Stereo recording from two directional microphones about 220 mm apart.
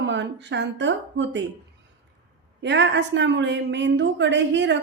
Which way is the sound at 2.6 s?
55° right (ahead or behind).